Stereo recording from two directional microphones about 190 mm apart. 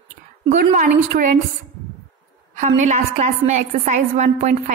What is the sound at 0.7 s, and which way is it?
Speech, 45° right (ahead or behind).